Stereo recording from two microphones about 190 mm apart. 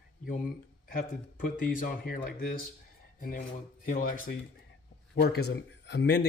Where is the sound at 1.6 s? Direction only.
45° left (ahead or behind).